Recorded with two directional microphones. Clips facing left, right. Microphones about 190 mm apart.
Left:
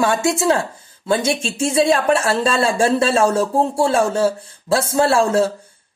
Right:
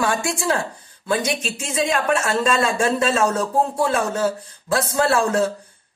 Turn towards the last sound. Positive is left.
turn(degrees=25)  # may be behind; listen again after turning